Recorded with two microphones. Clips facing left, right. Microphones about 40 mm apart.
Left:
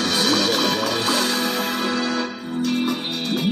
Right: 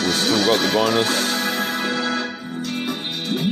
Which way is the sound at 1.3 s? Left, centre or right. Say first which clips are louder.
Even; right.